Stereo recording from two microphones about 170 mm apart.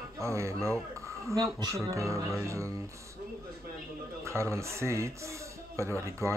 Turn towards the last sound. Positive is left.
turn(degrees=-15)  # may be behind; listen again after turning